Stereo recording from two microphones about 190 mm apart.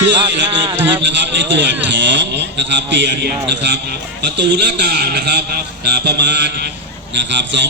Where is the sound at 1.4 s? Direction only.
70° right (ahead or behind).